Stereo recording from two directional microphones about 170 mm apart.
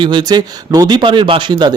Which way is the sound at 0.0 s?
25° right (ahead or behind).